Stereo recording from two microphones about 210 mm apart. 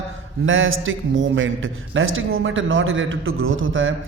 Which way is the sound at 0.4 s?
70° right (ahead or behind).